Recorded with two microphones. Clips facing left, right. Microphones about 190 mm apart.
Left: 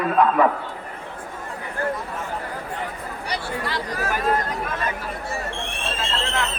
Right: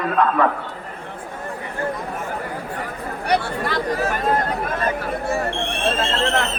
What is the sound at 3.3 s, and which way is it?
Speech, 55° right (ahead or behind).